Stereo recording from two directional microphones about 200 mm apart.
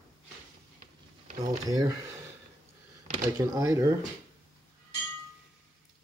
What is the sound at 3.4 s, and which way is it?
Speech, 15° right (ahead or behind).